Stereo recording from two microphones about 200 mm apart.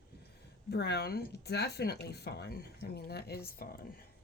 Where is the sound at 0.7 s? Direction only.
55° left (ahead or behind).